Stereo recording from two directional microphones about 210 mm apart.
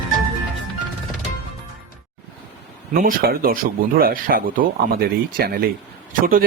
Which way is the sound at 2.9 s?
40° right (ahead or behind).